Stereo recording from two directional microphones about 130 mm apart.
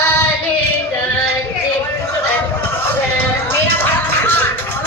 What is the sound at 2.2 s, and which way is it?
Music, 15° left (ahead or behind).